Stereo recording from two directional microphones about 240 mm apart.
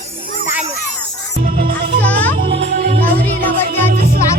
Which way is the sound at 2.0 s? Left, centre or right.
Centre.